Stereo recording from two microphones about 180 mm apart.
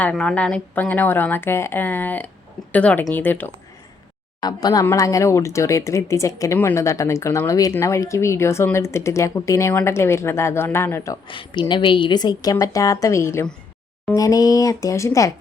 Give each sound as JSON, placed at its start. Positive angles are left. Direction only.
{"t": 0.0, "sound": "speech", "side_deg": 5}
{"t": 4.4, "sound": "speech", "side_deg": 20}